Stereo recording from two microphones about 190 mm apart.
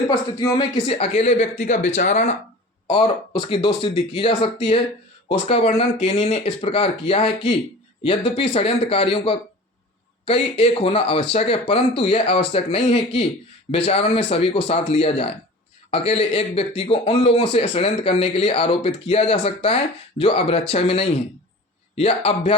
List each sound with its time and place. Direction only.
0.1 s speech: 20° left (ahead or behind); by 2.3 s 40° left (ahead or behind)
2.8 s a man's voice: 25° left (ahead or behind)